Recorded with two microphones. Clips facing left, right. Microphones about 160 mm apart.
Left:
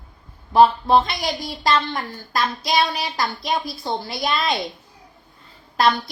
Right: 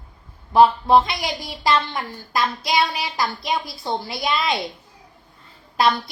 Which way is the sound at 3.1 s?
Centre (ahead or behind).